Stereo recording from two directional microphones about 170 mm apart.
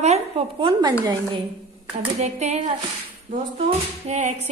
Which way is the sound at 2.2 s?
40° right (ahead or behind).